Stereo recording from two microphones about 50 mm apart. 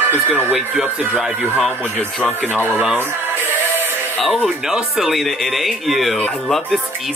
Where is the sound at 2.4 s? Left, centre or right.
Left.